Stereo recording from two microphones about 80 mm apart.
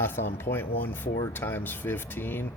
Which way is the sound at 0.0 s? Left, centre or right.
Left.